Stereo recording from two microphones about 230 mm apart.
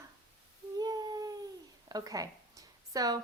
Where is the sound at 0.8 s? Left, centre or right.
Centre.